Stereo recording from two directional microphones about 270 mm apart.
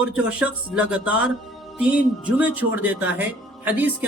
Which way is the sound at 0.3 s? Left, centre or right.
Centre.